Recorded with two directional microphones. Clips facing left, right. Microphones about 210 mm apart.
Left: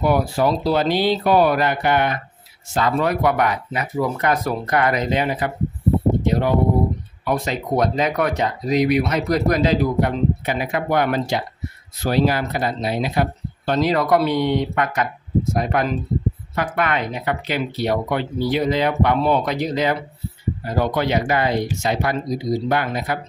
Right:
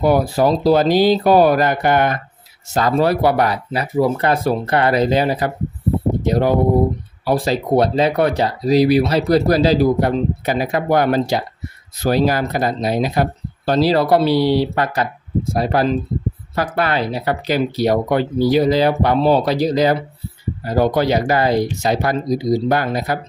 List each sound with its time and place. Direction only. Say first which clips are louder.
0.0 s speech: right 3 dB; 35° right (ahead or behind)